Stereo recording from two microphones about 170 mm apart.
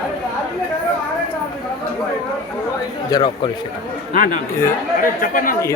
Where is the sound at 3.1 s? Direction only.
25° left (ahead or behind).